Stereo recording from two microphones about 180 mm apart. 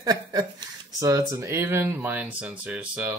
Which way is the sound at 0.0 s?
20° right (ahead or behind).